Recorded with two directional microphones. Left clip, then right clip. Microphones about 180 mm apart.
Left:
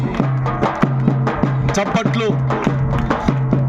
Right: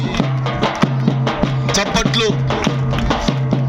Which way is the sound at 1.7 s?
55° left (ahead or behind).